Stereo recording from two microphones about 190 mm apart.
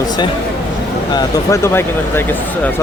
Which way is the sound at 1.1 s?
15° left (ahead or behind).